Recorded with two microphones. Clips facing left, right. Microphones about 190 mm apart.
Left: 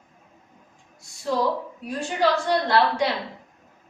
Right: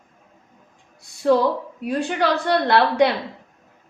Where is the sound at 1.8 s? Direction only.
60° right (ahead or behind).